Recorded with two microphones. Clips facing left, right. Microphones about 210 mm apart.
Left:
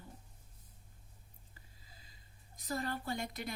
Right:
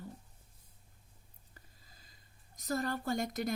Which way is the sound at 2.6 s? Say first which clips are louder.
Right 4 dB; 45° right (ahead or behind).